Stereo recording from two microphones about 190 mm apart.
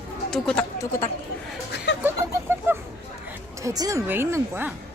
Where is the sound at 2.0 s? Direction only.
10° right (ahead or behind).